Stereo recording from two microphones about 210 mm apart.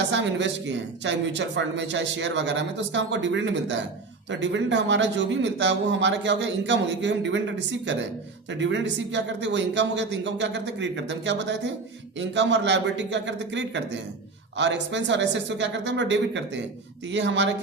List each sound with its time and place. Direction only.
0.0 s speech: 60° right (ahead or behind)